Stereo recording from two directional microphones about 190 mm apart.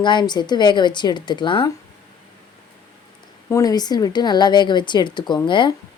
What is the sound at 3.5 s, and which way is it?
A woman's voice, 20° left (ahead or behind).